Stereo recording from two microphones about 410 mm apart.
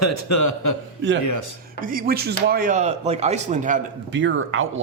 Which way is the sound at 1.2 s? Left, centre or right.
Left.